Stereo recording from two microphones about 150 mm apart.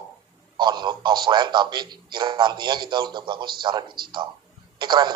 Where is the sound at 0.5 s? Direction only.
30° right (ahead or behind).